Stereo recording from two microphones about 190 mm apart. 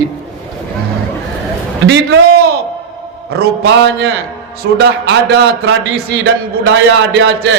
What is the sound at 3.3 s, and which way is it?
A man's voice, 55° right (ahead or behind).